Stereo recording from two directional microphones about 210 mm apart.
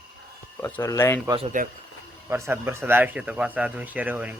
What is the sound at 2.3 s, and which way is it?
Speech, 10° right (ahead or behind).